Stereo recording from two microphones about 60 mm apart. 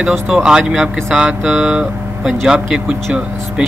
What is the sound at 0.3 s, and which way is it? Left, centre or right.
Speech, centre.